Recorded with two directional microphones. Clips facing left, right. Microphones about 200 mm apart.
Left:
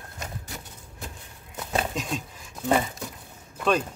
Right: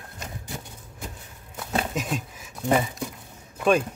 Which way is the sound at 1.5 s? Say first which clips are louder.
Right 1 dB; 5° right (ahead or behind).